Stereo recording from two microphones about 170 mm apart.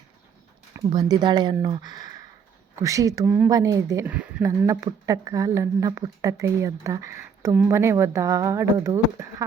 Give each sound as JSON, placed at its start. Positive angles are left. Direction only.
{"t": 0.9, "sound": "speech", "side_deg": -25}
{"t": 4.1, "sound": "a sound", "side_deg": -5}
{"t": 4.4, "sound": "speech", "side_deg": -20}